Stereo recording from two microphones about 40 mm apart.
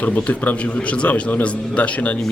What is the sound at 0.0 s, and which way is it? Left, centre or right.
Speech, left.